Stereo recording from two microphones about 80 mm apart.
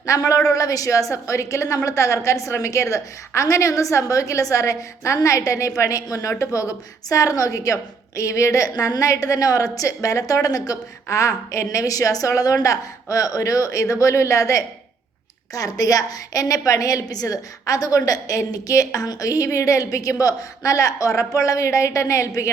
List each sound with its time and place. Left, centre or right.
0.0 s a woman's voice: left